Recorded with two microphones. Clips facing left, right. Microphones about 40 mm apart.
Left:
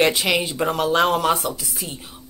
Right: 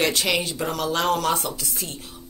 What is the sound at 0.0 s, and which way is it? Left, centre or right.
Speech, centre.